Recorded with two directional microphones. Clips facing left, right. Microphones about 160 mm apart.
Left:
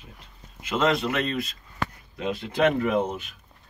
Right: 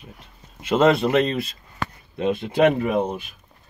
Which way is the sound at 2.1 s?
25° right (ahead or behind).